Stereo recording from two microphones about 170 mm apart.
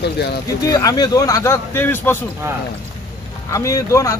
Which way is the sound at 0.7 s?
20° left (ahead or behind).